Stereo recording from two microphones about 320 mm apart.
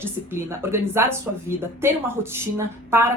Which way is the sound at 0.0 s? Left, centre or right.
Centre.